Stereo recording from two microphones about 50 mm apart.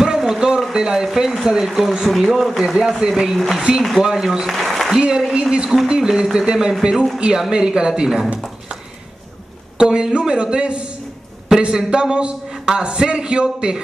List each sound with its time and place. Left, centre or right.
0.0 s a man's voice: centre
4.6 s applause: centre
4.9 s a man's voice: centre
9.8 s a man's voice: centre